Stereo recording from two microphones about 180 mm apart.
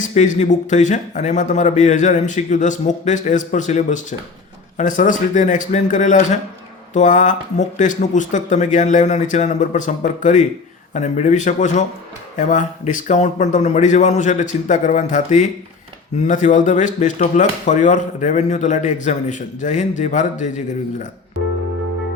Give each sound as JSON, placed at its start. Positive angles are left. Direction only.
{"t": 0.0, "sound": "a man's voice", "side_deg": 40}